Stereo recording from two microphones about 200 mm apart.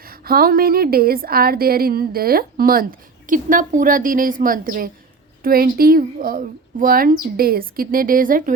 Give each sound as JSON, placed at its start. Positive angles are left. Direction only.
{"t": 0.0, "sound": "speech", "side_deg": -45}